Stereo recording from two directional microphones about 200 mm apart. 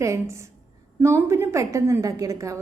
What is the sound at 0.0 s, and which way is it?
A woman's voice, 15° right (ahead or behind).